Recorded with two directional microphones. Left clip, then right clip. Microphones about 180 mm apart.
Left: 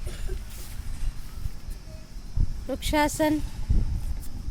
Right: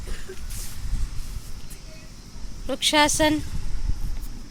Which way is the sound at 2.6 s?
15° left (ahead or behind).